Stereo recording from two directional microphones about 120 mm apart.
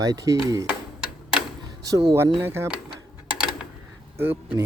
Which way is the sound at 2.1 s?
20° right (ahead or behind).